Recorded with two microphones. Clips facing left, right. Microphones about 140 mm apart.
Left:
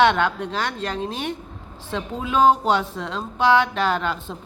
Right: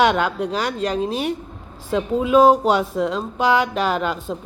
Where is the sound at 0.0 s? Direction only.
10° right (ahead or behind).